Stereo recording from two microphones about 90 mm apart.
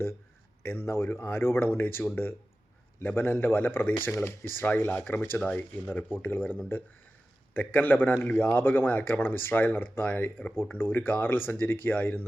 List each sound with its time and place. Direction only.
0.6 s speech: 25° left (ahead or behind)